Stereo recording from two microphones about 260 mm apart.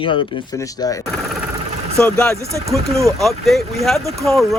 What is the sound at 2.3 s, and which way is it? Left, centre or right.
Speech, centre.